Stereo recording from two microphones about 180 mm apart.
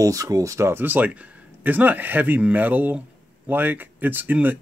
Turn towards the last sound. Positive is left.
turn(degrees=-10)  # may be behind; listen again after turning